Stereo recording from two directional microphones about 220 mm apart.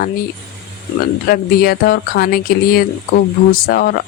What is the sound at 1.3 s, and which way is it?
Speech, 45° left (ahead or behind).